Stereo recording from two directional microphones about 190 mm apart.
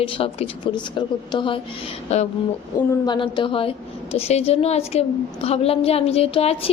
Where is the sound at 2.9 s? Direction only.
25° left (ahead or behind).